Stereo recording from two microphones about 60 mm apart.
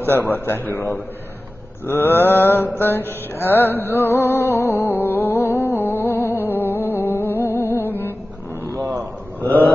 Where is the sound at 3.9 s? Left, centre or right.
Left.